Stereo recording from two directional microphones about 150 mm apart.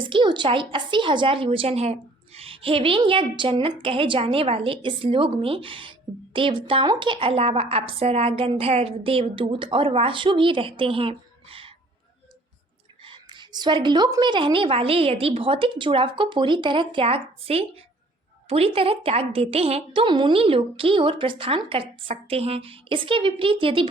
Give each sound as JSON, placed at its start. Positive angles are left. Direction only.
{"t": 0.0, "sound": "a woman's voice", "side_deg": -35}
{"t": 13.1, "sound": "a woman's voice", "side_deg": -30}